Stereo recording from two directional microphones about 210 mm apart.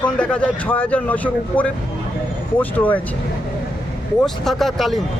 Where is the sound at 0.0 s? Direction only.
5° left (ahead or behind).